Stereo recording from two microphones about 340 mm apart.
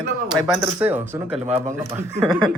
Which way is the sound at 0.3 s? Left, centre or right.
Centre.